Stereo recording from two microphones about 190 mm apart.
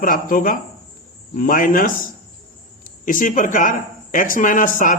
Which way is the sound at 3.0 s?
45° left (ahead or behind).